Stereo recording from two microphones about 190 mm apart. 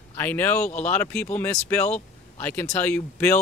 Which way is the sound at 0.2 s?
10° left (ahead or behind).